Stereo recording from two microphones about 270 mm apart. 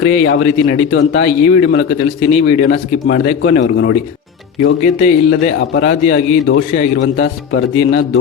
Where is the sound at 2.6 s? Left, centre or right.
Left.